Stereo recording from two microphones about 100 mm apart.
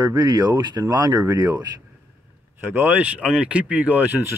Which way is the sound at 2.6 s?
20° right (ahead or behind).